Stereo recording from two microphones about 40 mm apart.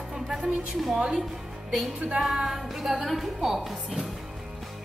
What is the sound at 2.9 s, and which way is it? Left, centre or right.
Speech, centre.